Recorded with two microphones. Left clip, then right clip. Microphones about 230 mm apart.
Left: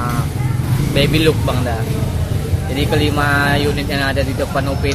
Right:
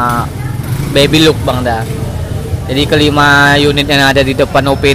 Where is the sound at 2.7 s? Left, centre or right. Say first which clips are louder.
Right 8 dB; right.